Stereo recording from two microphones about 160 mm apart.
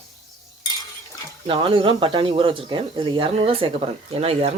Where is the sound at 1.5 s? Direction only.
35° right (ahead or behind).